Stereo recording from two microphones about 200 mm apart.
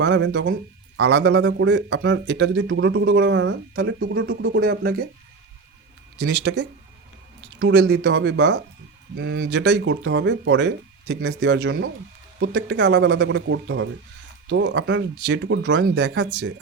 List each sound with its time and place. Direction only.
0.0 s speech: 65° right (ahead or behind)
6.1 s speech: 60° right (ahead or behind)